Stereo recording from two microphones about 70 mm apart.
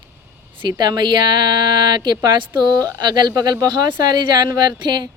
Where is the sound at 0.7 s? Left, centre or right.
Right.